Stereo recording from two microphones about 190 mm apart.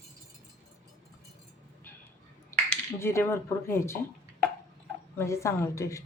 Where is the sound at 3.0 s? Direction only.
15° left (ahead or behind).